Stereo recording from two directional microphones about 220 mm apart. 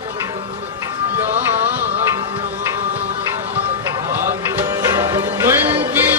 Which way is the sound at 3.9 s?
10° right (ahead or behind).